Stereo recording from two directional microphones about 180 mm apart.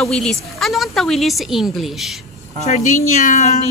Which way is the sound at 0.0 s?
5° left (ahead or behind).